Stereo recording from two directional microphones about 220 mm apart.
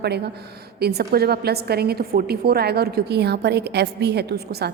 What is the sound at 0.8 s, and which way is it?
A woman's voice, 45° right (ahead or behind).